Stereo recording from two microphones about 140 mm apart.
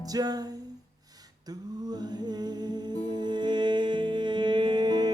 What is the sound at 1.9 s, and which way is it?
Music, 30° right (ahead or behind).